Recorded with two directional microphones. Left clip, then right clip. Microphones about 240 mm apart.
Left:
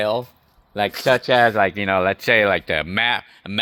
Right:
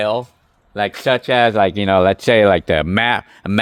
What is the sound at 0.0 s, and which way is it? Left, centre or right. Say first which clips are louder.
Speech: right 3 dB; centre.